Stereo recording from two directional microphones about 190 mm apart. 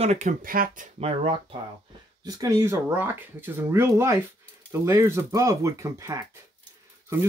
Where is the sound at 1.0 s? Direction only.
30° right (ahead or behind).